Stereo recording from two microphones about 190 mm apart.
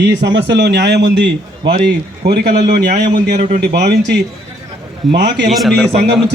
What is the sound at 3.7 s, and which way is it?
Speech, 60° right (ahead or behind).